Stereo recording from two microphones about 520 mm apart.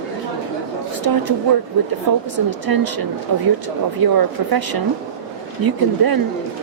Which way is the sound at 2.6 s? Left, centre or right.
Right.